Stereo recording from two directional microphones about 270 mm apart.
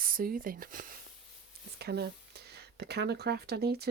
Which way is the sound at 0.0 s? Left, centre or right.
Right.